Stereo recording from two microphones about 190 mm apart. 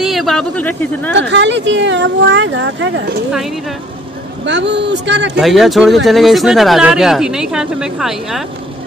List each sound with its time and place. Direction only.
0.0 s speech: centre (ahead or behind)
1.1 s speech: 65° right (ahead or behind)
3.3 s speech: centre (ahead or behind)
4.5 s speech: 70° right (ahead or behind)
5.4 s speech: centre (ahead or behind)